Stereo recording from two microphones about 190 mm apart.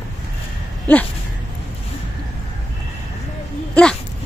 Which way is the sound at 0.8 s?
10° left (ahead or behind).